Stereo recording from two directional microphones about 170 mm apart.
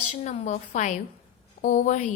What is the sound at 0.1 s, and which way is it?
A woman's voice, 45° left (ahead or behind).